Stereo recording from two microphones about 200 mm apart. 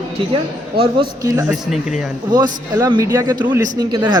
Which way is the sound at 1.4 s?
Centre (ahead or behind).